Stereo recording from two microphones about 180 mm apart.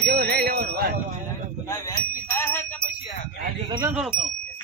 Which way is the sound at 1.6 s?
15° left (ahead or behind).